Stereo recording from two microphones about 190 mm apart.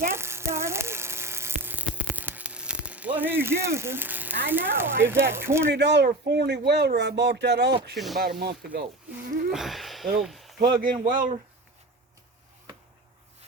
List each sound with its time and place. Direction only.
0.1 s a sound: 15° right (ahead or behind)
4.4 s speech: 10° right (ahead or behind)
5.7 s speech: 65° right (ahead or behind)
7.9 s speech: centre (ahead or behind)
8.2 s speech: 55° right (ahead or behind)
9.5 s speech: centre (ahead or behind)
10.6 s speech: 50° right (ahead or behind)